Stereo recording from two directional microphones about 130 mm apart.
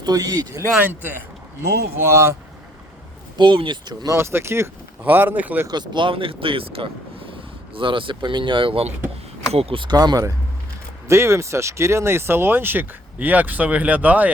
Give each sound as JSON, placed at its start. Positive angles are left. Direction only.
{"t": 0.0, "sound": "speech", "side_deg": -30}
{"t": 0.8, "sound": "speech", "side_deg": -15}
{"t": 3.3, "sound": "speech", "side_deg": -40}
{"t": 5.6, "sound": "speech", "side_deg": -35}